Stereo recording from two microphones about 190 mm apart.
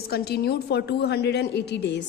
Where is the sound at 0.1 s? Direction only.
55° left (ahead or behind).